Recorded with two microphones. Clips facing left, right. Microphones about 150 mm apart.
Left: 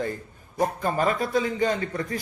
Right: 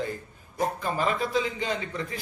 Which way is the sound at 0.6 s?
45° left (ahead or behind).